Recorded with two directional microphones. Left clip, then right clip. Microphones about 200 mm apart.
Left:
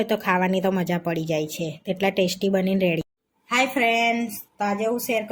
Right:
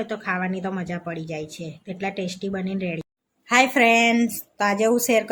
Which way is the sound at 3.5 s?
25° right (ahead or behind).